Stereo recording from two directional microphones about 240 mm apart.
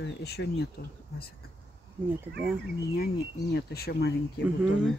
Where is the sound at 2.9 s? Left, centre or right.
Left.